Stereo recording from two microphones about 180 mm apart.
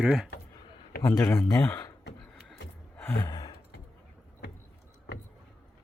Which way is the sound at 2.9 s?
10° left (ahead or behind).